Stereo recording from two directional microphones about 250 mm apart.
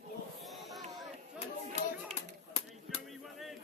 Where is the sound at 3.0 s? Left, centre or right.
Centre.